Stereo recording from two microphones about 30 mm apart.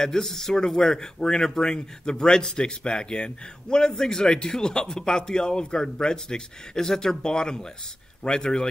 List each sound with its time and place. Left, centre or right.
0.0 s a man's voice: centre; by 3.9 s left
3.9 s a man's voice: centre